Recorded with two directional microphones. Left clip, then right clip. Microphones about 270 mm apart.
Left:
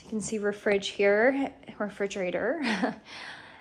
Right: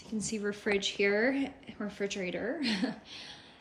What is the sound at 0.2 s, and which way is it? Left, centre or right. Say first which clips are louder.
A woman's voice: left 6 dB; centre.